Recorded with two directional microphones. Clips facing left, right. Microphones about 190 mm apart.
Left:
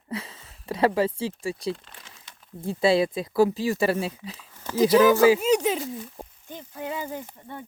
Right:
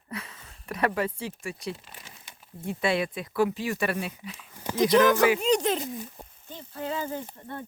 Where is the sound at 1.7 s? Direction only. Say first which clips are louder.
Left 5 dB; 10° right (ahead or behind).